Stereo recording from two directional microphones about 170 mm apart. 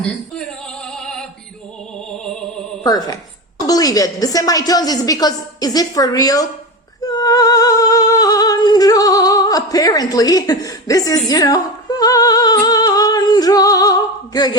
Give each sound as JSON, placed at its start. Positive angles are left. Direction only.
{"t": 0.0, "sound": "a sound", "side_deg": 0}
{"t": 2.0, "sound": "music", "side_deg": 5}
{"t": 2.8, "sound": "a woman's voice", "side_deg": 20}
{"t": 7.0, "sound": "humming", "side_deg": 20}